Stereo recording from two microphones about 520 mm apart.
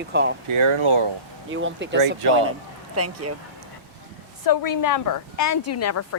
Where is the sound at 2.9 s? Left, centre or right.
Right.